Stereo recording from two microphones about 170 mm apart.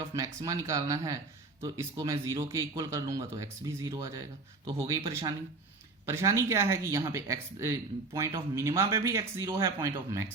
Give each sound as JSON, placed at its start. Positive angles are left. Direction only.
{"t": 0.1, "sound": "speech", "side_deg": -20}